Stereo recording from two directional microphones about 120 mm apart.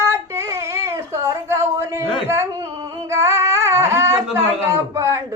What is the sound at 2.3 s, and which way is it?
Singing, 25° right (ahead or behind).